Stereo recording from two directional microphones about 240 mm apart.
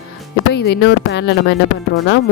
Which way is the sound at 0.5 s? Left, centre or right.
Left.